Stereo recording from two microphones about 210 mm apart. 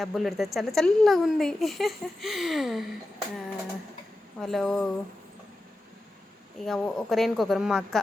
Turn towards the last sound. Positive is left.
turn(degrees=0)  # may be behind; listen again after turning